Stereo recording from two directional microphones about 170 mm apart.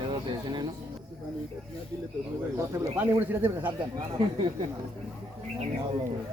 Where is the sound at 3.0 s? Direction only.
10° right (ahead or behind).